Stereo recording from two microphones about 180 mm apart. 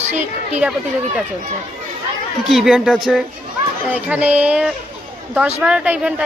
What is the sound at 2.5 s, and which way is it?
A woman's voice, centre (ahead or behind).